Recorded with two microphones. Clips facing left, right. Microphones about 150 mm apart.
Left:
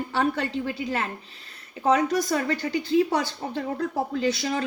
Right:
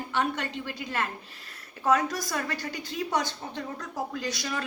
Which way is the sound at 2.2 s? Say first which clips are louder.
Left 7 dB; 25° left (ahead or behind).